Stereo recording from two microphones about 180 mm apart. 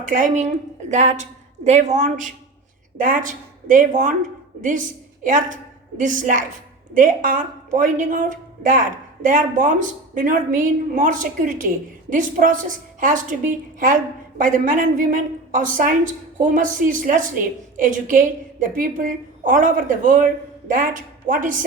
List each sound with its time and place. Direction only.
0.0 s a woman's voice: 50° right (ahead or behind)